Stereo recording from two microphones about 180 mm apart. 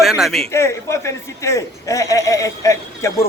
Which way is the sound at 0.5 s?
15° left (ahead or behind).